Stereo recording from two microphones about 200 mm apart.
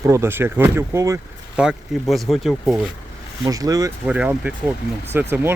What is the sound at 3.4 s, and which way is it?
Speech, 15° right (ahead or behind).